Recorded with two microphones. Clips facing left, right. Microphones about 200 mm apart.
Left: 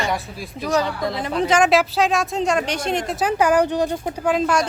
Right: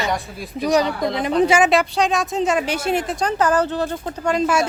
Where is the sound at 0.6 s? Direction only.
15° right (ahead or behind).